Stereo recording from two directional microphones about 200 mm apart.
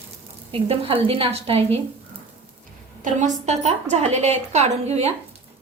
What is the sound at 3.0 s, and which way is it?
A woman's voice, 40° right (ahead or behind).